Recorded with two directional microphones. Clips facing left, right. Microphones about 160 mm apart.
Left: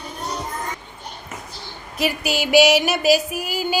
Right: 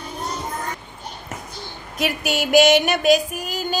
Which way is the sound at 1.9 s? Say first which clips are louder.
Even; centre (ahead or behind).